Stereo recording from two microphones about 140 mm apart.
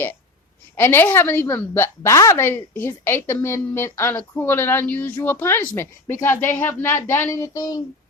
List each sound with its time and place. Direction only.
0.8 s a woman's voice: 15° left (ahead or behind)